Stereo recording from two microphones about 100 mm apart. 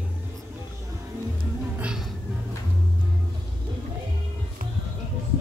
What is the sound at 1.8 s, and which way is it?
Music, 5° right (ahead or behind).